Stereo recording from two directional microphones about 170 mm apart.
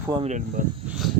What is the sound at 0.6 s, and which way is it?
Speech, 55° right (ahead or behind).